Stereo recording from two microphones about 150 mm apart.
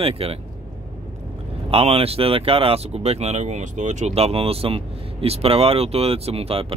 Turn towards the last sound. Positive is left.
turn(degrees=-40)  # may be behind; listen again after turning